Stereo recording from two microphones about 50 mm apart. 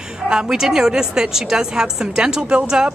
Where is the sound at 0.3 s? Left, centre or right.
Centre.